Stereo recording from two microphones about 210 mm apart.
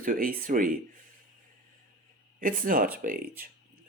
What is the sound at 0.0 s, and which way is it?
Speech, 40° right (ahead or behind).